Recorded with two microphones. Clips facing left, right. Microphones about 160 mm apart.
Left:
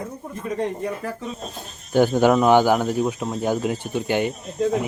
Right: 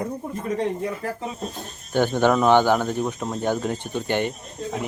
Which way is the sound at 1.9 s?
10° left (ahead or behind).